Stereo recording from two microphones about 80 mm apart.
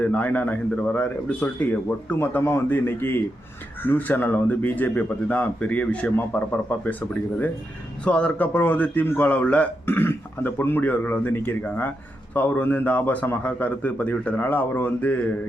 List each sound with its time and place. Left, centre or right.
0.0 s a man's voice: centre